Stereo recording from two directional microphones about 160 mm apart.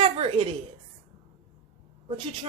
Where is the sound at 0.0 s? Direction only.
35° right (ahead or behind).